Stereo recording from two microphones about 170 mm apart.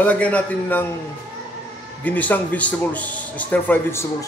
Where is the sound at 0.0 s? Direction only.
10° left (ahead or behind).